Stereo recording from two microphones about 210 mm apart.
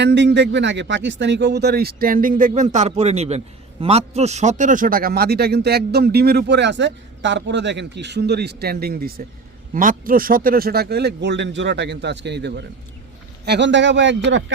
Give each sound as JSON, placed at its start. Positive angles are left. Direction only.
{"t": 0.0, "sound": "a man's voice", "side_deg": -55}